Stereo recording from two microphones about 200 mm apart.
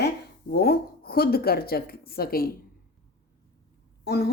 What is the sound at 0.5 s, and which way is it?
A woman's voice, 50° left (ahead or behind).